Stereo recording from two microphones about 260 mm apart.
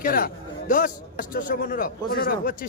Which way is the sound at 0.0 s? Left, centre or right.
Left.